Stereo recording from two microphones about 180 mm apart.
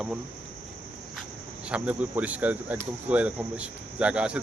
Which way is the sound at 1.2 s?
5° right (ahead or behind).